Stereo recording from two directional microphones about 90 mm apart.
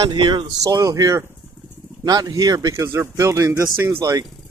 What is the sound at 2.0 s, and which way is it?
Speech, 50° right (ahead or behind).